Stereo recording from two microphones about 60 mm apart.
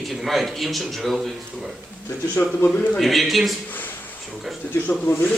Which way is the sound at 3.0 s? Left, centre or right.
Centre.